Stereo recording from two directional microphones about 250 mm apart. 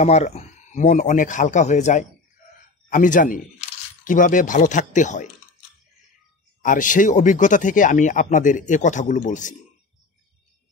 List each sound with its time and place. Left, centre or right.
0.0 s speech: left
6.6 s speech: left